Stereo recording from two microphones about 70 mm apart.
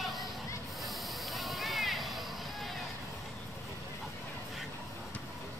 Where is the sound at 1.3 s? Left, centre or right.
Centre.